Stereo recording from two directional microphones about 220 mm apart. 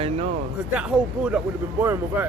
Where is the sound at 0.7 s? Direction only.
5° right (ahead or behind).